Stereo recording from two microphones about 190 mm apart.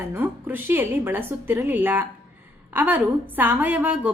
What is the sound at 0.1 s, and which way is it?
A woman's voice, 10° right (ahead or behind).